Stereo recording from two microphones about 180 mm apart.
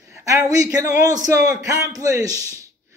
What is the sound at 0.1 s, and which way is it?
A man's voice, 15° right (ahead or behind).